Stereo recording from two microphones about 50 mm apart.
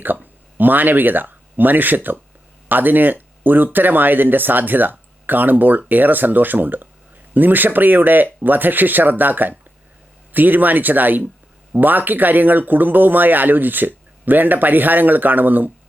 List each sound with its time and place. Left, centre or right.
0.0 s speech: right